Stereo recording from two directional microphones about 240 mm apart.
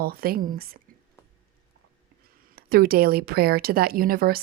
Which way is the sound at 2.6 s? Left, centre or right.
Right.